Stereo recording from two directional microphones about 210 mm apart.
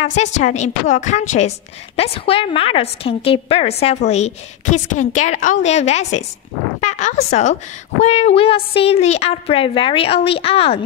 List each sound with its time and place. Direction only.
0.0 s a woman's voice: 35° left (ahead or behind)